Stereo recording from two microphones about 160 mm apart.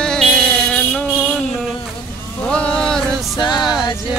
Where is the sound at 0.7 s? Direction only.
5° left (ahead or behind).